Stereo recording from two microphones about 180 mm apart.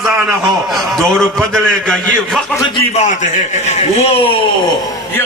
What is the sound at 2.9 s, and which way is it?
A man's voice, 40° left (ahead or behind).